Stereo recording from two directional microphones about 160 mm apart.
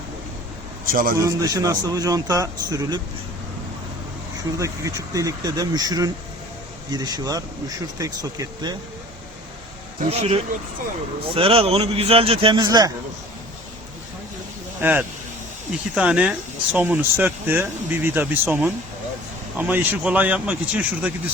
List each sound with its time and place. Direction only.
0.9 s a man's voice: 60° right (ahead or behind)
1.2 s a man's voice: 25° right (ahead or behind)
4.5 s a man's voice: 20° right (ahead or behind)
10.1 s a man's voice: 40° right (ahead or behind); by 12.9 s 25° right (ahead or behind)
14.8 s speech: 10° right (ahead or behind)